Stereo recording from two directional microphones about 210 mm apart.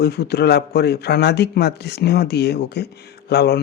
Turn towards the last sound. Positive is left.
turn(degrees=50)  # may be behind; listen again after turning